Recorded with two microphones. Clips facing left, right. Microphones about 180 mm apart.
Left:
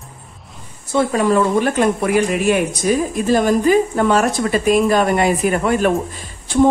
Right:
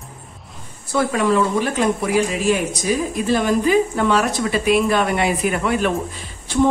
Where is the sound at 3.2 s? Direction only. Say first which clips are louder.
Left 3 dB; 45° left (ahead or behind).